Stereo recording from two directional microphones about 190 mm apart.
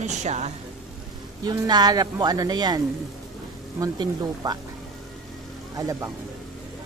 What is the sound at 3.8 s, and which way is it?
Speech, 20° right (ahead or behind).